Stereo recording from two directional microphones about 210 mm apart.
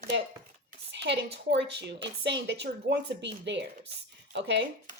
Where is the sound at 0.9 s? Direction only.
55° right (ahead or behind).